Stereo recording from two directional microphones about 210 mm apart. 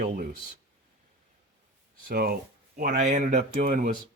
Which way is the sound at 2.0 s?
45° right (ahead or behind).